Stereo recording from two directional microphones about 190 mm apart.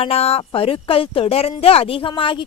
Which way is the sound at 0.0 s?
30° left (ahead or behind).